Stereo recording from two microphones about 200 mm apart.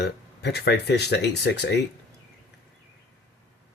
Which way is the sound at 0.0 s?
60° left (ahead or behind).